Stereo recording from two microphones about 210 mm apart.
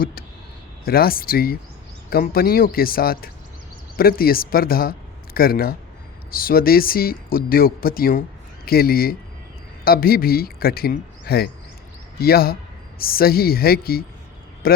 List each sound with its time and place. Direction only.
0.0 s speech: 45° left (ahead or behind)